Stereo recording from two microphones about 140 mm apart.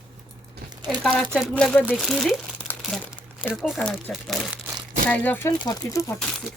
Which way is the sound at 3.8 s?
10° left (ahead or behind).